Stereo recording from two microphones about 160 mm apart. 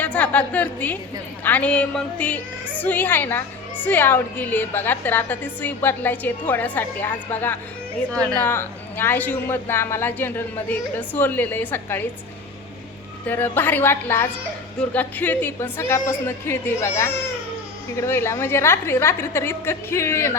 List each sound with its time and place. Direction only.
0.0 s a woman's voice: 10° left (ahead or behind)
13.2 s a woman's voice: 10° left (ahead or behind)